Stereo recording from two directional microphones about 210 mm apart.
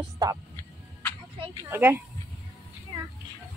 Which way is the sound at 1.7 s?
10° right (ahead or behind).